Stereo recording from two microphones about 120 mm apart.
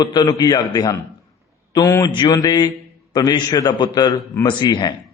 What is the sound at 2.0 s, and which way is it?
A man's voice, 35° left (ahead or behind).